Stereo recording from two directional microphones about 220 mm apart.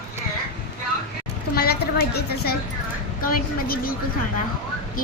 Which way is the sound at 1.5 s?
45° left (ahead or behind).